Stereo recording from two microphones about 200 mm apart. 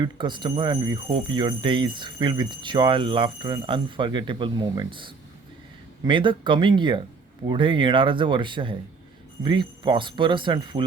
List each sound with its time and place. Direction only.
0.0 s speech: 25° right (ahead or behind)